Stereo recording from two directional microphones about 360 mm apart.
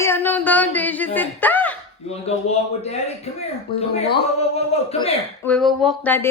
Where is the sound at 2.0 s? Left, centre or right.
Centre.